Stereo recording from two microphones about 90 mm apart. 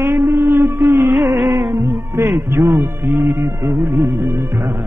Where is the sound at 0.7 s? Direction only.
30° right (ahead or behind).